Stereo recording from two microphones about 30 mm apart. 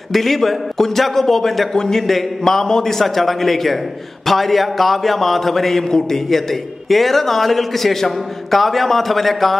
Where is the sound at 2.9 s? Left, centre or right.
Centre.